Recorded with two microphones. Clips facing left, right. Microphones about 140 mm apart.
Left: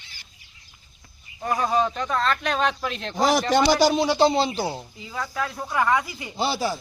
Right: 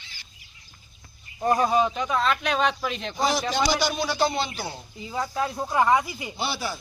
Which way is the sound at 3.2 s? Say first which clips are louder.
Left 5 dB; 90° left.